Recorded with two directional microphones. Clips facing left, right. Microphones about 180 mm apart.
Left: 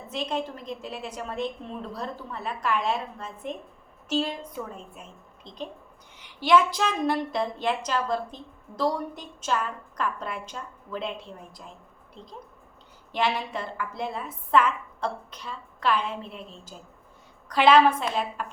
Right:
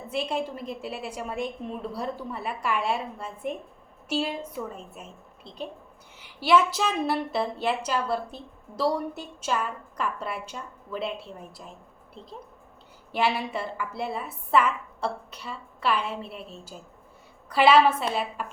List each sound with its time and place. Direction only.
0.1 s a woman's voice: 10° right (ahead or behind)